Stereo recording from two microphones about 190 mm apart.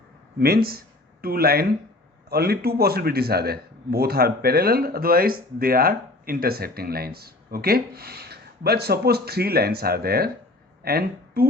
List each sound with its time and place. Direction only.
0.3 s a man's voice: 55° right (ahead or behind)